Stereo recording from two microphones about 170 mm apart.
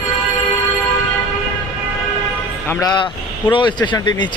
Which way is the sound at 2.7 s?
20° left (ahead or behind).